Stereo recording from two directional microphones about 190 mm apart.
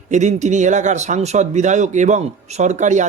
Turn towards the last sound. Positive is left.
turn(degrees=-40)  # may be behind; listen again after turning